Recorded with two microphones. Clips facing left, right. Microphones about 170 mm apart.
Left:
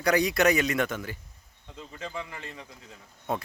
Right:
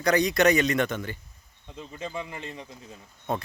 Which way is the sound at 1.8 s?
20° right (ahead or behind).